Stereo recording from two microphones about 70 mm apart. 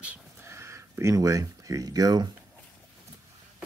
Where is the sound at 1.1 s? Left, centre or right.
Right.